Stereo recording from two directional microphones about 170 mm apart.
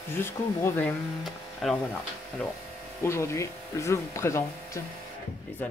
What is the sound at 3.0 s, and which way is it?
Speech, 15° left (ahead or behind).